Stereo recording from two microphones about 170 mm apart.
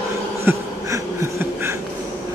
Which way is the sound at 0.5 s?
15° right (ahead or behind).